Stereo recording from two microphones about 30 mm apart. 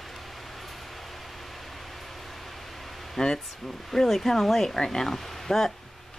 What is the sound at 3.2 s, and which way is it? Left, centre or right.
Speech, centre.